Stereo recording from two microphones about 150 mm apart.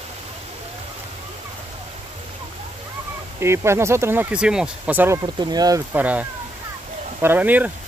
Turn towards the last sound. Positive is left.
turn(degrees=-10)  # may be behind; listen again after turning